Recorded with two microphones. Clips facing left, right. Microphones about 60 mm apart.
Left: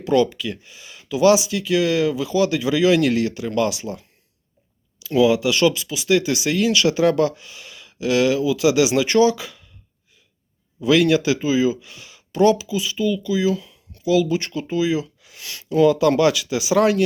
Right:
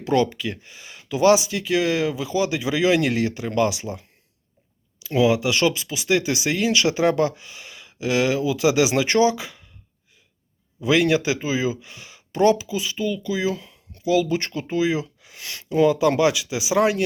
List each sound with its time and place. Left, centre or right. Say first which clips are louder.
0.0 s speech: left 2 dB; right
10.8 s speech: left 3 dB; right